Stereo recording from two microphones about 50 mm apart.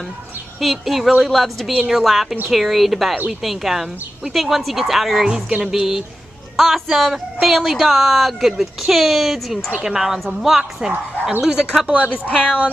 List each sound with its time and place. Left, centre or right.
0.6 s a woman's voice: centre
9.7 s a woman's voice: right
9.9 s a woman's voice: centre
12.3 s a woman's voice: left